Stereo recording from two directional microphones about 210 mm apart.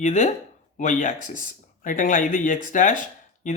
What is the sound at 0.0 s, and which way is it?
Speech, 35° left (ahead or behind).